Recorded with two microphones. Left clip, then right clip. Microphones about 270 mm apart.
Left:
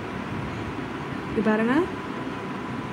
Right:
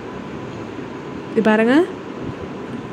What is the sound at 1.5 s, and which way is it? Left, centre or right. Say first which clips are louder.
Speech: right 8 dB; centre.